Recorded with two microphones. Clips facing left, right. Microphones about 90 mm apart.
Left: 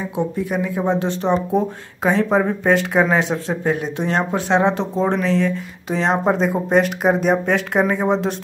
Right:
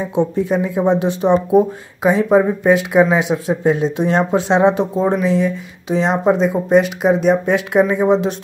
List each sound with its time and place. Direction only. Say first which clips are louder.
0.1 s speech: right 6 dB; 25° right (ahead or behind); by 3.5 s 10° right (ahead or behind)
3.6 s speech: right 6 dB; 20° right (ahead or behind); by 8.4 s centre (ahead or behind)